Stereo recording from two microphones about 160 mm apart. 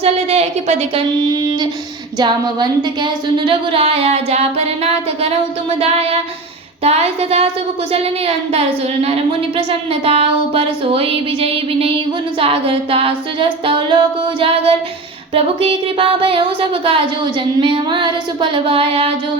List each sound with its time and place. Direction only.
0.0 s speech: 40° right (ahead or behind)
2.1 s speech: 30° right (ahead or behind)
8.5 s speech: 40° right (ahead or behind)